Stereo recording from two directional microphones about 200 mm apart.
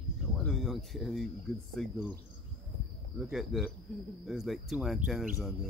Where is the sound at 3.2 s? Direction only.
Centre (ahead or behind).